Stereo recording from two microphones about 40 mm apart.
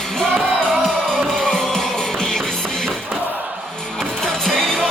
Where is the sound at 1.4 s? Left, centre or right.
Centre.